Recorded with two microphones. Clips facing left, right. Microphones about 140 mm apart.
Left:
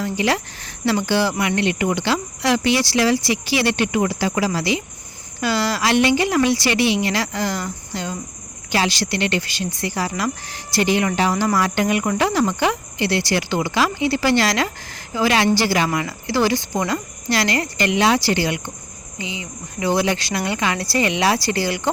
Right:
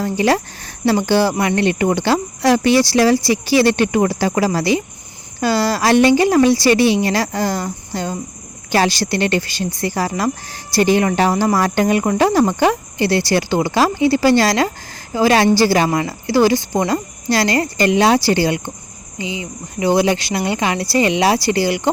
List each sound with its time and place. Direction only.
0.0 s speech: 40° right (ahead or behind)